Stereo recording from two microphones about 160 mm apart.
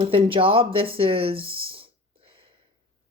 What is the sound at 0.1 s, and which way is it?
A woman's voice, 35° right (ahead or behind).